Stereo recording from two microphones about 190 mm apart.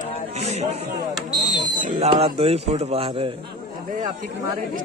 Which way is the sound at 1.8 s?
40° right (ahead or behind).